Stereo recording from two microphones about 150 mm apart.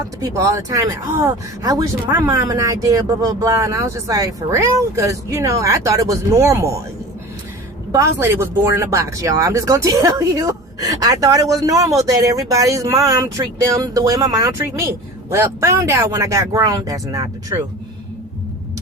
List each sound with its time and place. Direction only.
0.2 s speech: 20° right (ahead or behind)
7.9 s speech: 20° right (ahead or behind)